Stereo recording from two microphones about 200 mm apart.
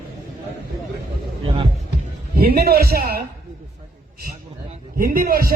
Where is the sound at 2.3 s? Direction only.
50° right (ahead or behind).